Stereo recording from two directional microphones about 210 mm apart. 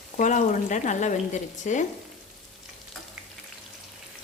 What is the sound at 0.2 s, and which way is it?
Speech, 35° left (ahead or behind).